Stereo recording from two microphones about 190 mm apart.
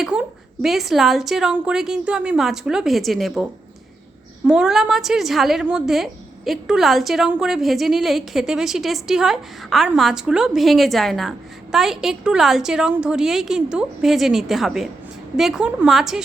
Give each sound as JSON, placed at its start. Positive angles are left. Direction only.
{"t": 0.0, "sound": "a woman's voice", "side_deg": -5}
{"t": 4.4, "sound": "a woman's voice", "side_deg": -5}